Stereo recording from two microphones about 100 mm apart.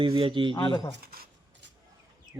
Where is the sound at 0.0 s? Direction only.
60° right (ahead or behind).